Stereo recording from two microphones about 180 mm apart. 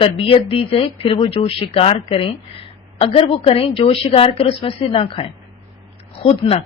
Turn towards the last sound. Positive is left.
turn(degrees=35)  # may be behind; listen again after turning